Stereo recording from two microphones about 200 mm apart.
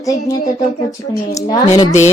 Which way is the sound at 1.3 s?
20° left (ahead or behind).